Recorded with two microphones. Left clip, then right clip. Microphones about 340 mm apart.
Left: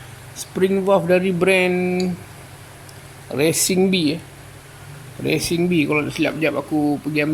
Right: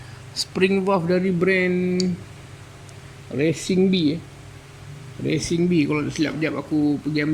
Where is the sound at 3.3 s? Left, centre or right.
Left.